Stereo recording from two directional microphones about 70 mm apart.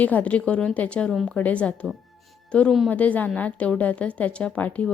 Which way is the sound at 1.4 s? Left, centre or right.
Centre.